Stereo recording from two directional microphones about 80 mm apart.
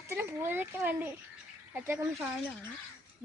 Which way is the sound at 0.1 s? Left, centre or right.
Right.